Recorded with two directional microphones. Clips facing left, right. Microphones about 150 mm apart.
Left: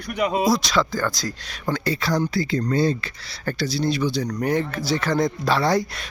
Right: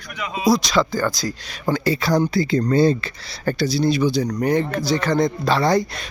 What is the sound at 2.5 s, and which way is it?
Speech, 30° right (ahead or behind).